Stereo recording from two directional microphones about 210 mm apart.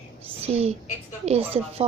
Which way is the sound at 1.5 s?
30° right (ahead or behind).